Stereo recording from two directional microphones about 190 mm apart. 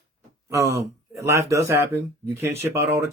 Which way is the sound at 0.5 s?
15° right (ahead or behind).